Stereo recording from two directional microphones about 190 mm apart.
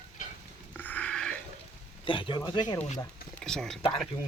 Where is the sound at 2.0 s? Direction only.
25° left (ahead or behind).